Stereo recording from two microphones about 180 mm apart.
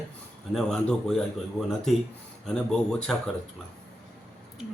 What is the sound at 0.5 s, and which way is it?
Speech, centre (ahead or behind).